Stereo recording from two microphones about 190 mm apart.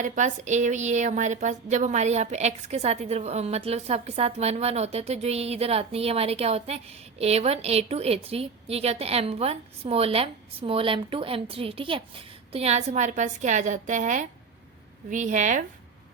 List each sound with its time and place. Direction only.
0.0 s a woman's voice: 40° right (ahead or behind)